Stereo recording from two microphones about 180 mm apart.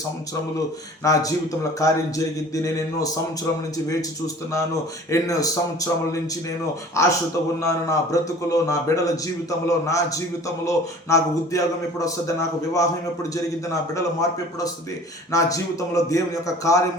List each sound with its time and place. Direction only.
1.0 s a man's voice: 20° left (ahead or behind)
5.1 s a man's voice: 20° left (ahead or behind)
13.9 s a man's voice: 20° left (ahead or behind)